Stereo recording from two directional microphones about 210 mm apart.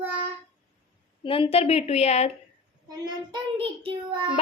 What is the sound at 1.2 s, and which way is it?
A woman's voice, 25° left (ahead or behind).